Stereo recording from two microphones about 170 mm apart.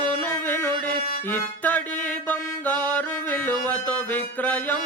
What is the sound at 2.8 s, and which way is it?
Music, 10° left (ahead or behind).